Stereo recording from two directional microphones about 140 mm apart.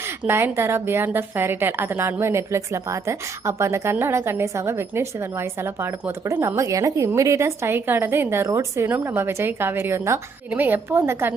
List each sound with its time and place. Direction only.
0.3 s a woman's voice: 15° right (ahead or behind)